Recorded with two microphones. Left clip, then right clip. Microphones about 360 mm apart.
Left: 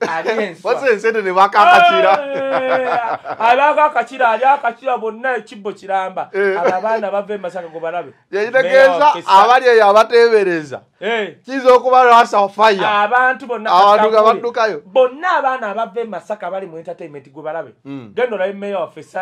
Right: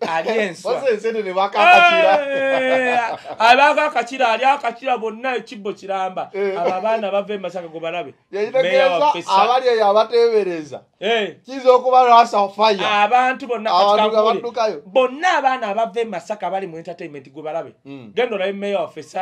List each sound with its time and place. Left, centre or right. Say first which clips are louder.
0.3 s a man's voice: left 2 dB; left
3.3 s a man's voice: even; right; by 5.3 s centre
5.7 s a man's voice: left 4 dB; centre
6.3 s a man's voice: left 6 dB; left
6.8 s a man's voice: left 2 dB; centre
8.3 s a man's voice: left 4 dB; left
11.0 s speech: even; centre
11.5 s a man's voice: left 3 dB; left
12.9 s a man's voice: left 2 dB; centre
13.7 s a man's voice: left 5 dB; left
15.2 s a man's voice: left 1 dB; centre
18.1 s a man's voice: left 2 dB; centre